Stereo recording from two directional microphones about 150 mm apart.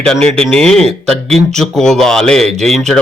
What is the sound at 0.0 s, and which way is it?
A man's voice, 5° left (ahead or behind).